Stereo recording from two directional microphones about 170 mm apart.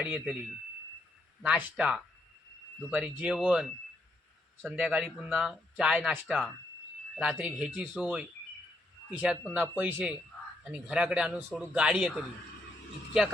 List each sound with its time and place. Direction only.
0.0 s speech: 5° right (ahead or behind)
1.4 s speech: 5° right (ahead or behind)